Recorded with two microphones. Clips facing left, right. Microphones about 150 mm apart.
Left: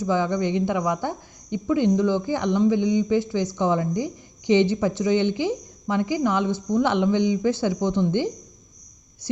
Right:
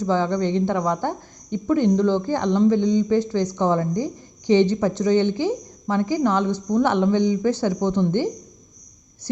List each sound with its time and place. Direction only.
0.0 s a woman's voice: 15° left (ahead or behind)
7.8 s a woman's voice: 15° right (ahead or behind)